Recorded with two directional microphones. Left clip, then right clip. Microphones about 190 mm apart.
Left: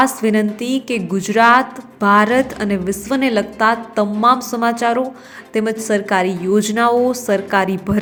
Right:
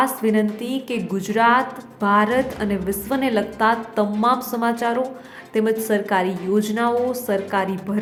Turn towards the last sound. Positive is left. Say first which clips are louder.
# left 6 dB
turn(degrees=20)  # may be behind; listen again after turning